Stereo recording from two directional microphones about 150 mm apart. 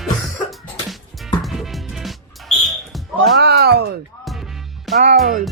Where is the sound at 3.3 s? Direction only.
90° right.